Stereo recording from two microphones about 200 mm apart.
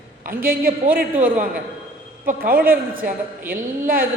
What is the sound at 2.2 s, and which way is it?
A woman's voice, 45° right (ahead or behind).